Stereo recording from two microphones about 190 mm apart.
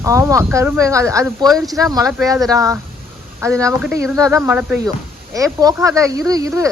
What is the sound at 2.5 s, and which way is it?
Speech, 15° right (ahead or behind).